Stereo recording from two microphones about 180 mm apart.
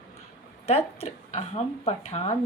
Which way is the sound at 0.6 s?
35° left (ahead or behind).